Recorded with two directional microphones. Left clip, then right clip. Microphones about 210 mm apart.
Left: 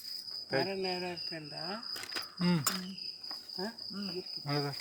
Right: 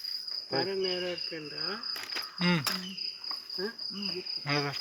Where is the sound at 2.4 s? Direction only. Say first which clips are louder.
Right 6 dB; 10° left (ahead or behind).